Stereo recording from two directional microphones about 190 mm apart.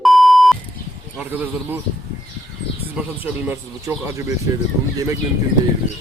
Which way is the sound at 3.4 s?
15° right (ahead or behind).